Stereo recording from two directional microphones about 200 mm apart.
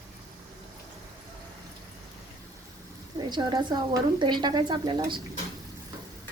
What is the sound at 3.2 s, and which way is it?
Speech, 20° right (ahead or behind).